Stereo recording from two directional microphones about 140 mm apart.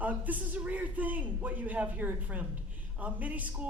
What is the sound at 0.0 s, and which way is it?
Speech, 10° right (ahead or behind).